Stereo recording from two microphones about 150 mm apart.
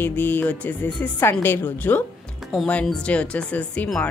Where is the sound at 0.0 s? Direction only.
10° left (ahead or behind).